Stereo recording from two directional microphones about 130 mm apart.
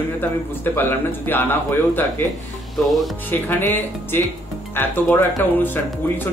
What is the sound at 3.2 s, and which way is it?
Speech, 15° left (ahead or behind).